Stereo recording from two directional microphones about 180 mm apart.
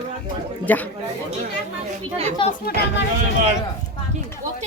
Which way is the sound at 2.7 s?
60° left (ahead or behind).